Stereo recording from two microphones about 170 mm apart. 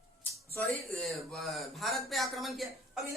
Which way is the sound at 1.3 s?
Centre (ahead or behind).